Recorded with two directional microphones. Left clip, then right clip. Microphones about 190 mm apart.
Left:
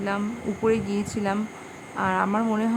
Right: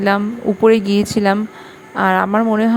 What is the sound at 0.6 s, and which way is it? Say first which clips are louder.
Speech: right 11 dB; 40° right (ahead or behind).